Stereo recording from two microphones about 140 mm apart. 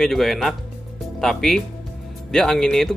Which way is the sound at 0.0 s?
Centre (ahead or behind).